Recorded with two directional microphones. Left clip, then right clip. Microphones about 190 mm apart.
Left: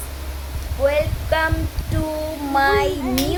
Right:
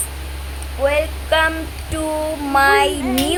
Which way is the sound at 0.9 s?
10° right (ahead or behind).